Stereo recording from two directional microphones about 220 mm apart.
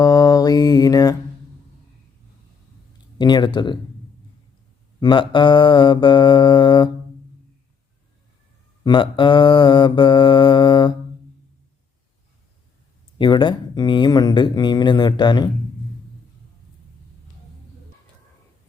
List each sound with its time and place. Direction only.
0.0 s mantra: 15° left (ahead or behind)
3.2 s speech: 20° left (ahead or behind)
4.9 s speech: 20° left (ahead or behind)
8.8 s speech: 20° left (ahead or behind)
13.1 s speech: 20° left (ahead or behind)